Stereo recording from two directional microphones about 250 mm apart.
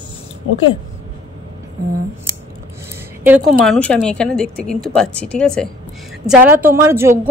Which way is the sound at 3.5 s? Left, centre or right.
Centre.